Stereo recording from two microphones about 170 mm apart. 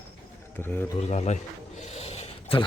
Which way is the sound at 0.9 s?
40° left (ahead or behind).